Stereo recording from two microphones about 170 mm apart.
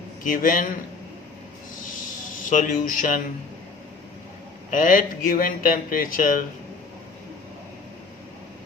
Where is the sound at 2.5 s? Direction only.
50° left (ahead or behind).